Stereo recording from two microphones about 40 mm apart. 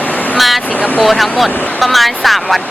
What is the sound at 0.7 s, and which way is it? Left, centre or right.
Speech, left.